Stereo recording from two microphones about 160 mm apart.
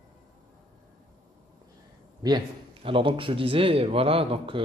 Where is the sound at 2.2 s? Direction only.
25° right (ahead or behind).